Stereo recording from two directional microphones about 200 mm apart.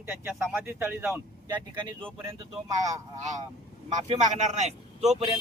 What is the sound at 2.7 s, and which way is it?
Speech, 15° right (ahead or behind).